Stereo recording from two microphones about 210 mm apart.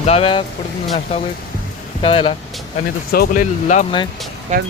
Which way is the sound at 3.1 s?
40° left (ahead or behind).